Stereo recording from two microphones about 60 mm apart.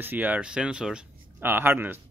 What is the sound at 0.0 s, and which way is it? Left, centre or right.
Speech, right.